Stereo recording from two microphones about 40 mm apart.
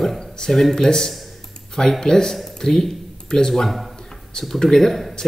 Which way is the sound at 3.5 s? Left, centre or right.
Centre.